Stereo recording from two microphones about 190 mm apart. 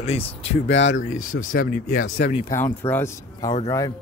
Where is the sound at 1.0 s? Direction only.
45° left (ahead or behind).